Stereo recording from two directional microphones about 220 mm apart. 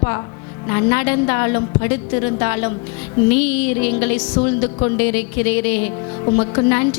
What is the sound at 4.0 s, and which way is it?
Speech, 15° left (ahead or behind).